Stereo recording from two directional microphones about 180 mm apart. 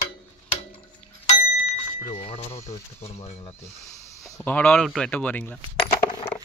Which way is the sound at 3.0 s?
35° left (ahead or behind).